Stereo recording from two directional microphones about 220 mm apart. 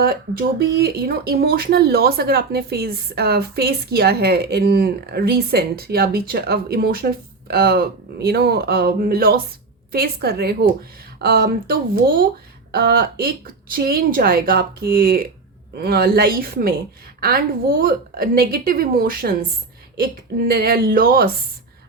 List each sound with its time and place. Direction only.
0.0 s speech: 45° right (ahead or behind)